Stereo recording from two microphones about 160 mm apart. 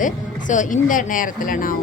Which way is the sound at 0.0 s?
55° left (ahead or behind).